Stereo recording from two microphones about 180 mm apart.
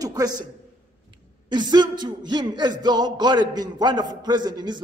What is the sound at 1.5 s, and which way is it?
Music, 25° right (ahead or behind).